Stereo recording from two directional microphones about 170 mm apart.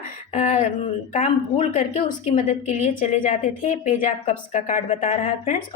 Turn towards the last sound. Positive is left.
turn(degrees=50)  # may be behind; listen again after turning